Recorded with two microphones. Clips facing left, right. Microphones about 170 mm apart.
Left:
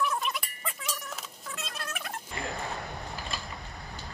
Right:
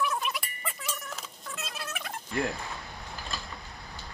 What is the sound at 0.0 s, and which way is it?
Music, centre (ahead or behind).